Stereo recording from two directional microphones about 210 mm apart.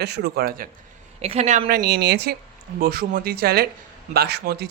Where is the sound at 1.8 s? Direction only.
50° right (ahead or behind).